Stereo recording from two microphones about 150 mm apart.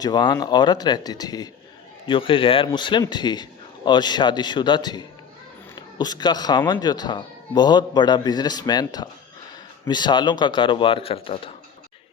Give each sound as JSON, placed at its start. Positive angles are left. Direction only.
{"t": 0.0, "sound": "a man's voice", "side_deg": 30}